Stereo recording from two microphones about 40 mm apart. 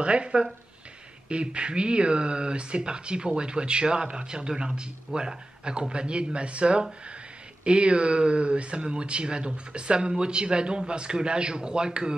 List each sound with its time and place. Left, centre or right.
0.0 s speech: right